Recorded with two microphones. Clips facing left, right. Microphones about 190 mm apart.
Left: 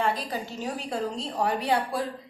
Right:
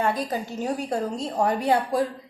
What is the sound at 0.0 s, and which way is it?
A woman's voice, 45° right (ahead or behind).